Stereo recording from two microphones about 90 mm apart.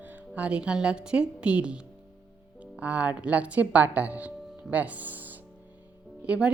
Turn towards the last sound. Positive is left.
turn(degrees=-10)  # may be behind; listen again after turning